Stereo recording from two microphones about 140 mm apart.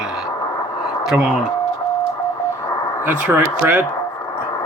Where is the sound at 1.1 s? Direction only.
5° right (ahead or behind).